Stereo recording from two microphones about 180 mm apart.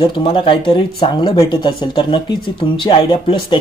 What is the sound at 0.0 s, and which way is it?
Speech, 30° left (ahead or behind).